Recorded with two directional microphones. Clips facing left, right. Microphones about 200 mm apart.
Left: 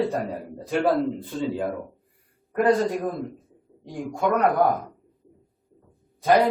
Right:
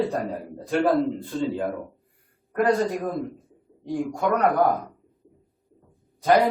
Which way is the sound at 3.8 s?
Centre (ahead or behind).